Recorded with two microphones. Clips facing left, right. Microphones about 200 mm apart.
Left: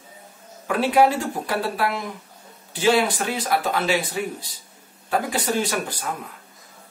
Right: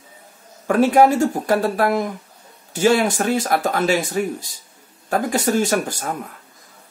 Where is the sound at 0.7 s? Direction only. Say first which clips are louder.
Right 4 dB; 45° right (ahead or behind).